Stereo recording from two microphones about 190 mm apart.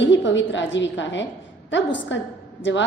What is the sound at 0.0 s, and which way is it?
Speech, 70° left (ahead or behind).